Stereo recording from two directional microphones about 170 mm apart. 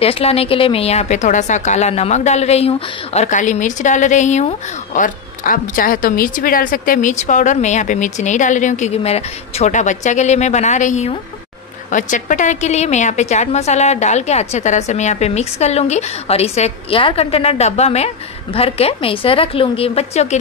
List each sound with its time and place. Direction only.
0.0 s a woman's voice: 35° left (ahead or behind)